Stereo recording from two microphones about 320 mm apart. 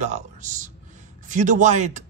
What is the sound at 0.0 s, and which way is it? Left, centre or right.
A man's voice, right.